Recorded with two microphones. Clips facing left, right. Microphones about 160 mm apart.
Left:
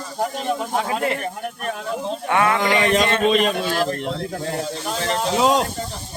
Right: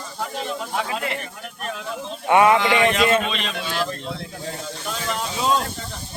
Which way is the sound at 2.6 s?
40° left (ahead or behind).